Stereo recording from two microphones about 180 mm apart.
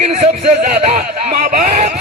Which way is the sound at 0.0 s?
35° right (ahead or behind).